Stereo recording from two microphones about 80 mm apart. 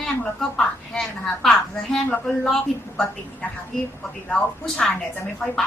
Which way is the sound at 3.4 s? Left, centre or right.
Centre.